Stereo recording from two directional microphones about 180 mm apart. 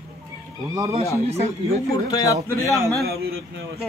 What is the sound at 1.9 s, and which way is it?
Speech, 20° left (ahead or behind).